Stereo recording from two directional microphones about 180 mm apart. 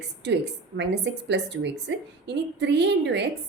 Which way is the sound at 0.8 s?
70° right (ahead or behind).